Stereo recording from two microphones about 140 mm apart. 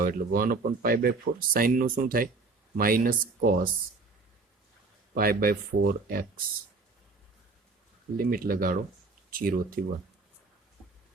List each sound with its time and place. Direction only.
0.0 s speech: 90° right
5.1 s speech: 90° right
8.1 s speech: 90° right